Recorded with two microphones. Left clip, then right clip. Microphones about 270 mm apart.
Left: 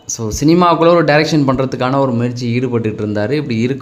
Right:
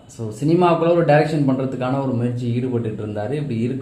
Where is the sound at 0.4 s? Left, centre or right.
Left.